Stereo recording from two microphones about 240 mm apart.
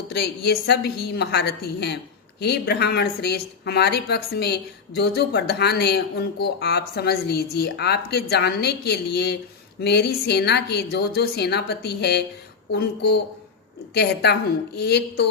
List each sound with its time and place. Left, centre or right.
0.1 s a woman's voice: left
13.9 s a woman's voice: left